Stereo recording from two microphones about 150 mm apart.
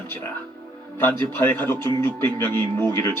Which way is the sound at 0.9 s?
15° left (ahead or behind).